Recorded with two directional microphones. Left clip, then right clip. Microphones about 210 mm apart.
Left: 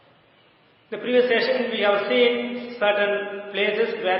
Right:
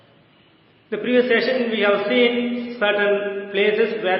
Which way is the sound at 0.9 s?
Centre (ahead or behind).